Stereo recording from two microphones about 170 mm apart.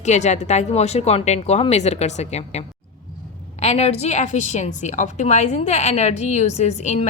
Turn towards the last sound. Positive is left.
turn(degrees=40)  # may be behind; listen again after turning